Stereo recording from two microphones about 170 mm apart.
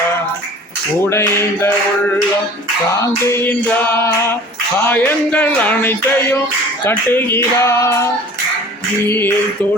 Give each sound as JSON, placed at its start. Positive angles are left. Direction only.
{"t": 1.0, "sound": "music", "side_deg": 15}
{"t": 3.0, "sound": "music", "side_deg": 20}
{"t": 9.0, "sound": "music", "side_deg": 15}